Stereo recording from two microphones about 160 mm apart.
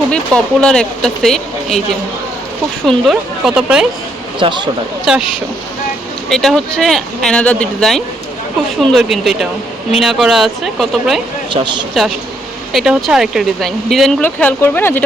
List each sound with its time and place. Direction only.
0.1 s speech: 5° left (ahead or behind)
2.8 s speech: centre (ahead or behind)
4.4 s speech: 30° right (ahead or behind)
5.1 s speech: 5° right (ahead or behind)
6.3 s speech: centre (ahead or behind)
11.5 s speech: 30° right (ahead or behind)
12.7 s speech: 5° right (ahead or behind); by 15.0 s 10° left (ahead or behind)